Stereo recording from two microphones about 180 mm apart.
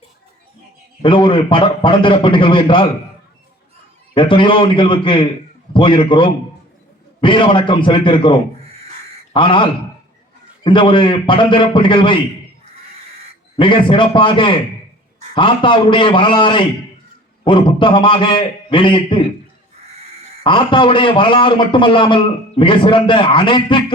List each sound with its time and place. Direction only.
1.0 s a man's voice: 30° left (ahead or behind)
4.1 s a man's voice: 30° left (ahead or behind)
13.6 s a man's voice: 30° left (ahead or behind)
20.4 s a man's voice: 30° left (ahead or behind)